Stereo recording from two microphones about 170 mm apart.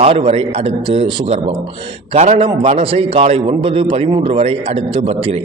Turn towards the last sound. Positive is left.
turn(degrees=-35)  # may be behind; listen again after turning